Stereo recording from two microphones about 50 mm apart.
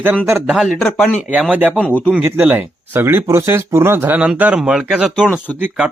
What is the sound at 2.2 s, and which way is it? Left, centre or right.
Speech, right.